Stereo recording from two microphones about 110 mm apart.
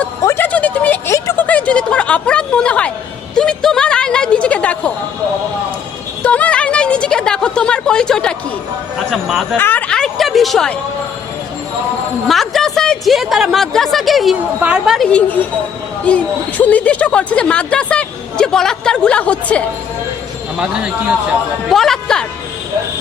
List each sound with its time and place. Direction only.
0.3 s a sound: 20° left (ahead or behind)
1.1 s a sound: 25° left (ahead or behind)
1.5 s a woman's voice: 10° left (ahead or behind)
6.2 s a sound: 10° left (ahead or behind)
9.0 s a woman's voice: centre (ahead or behind)
9.6 s a woman's voice: 15° left (ahead or behind)
12.3 s a woman's voice: 5° left (ahead or behind)
14.9 s speech: 10° left (ahead or behind)
20.6 s speech: 10° right (ahead or behind)
21.7 s speech: 5° left (ahead or behind)